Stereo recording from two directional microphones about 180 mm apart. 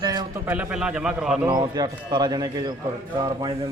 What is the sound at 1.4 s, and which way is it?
Speech, 20° right (ahead or behind).